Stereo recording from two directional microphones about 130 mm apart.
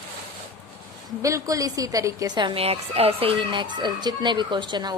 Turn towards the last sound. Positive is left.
turn(degrees=-35)  # may be behind; listen again after turning